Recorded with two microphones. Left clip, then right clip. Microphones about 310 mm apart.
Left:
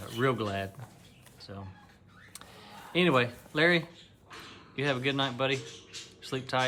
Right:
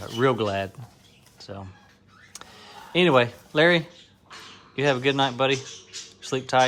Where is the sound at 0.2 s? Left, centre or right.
Centre.